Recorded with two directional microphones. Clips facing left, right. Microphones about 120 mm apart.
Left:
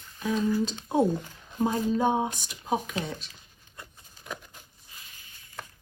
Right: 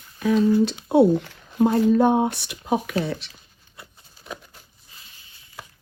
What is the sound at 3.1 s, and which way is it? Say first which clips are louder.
Speech: right 8 dB; 85° right.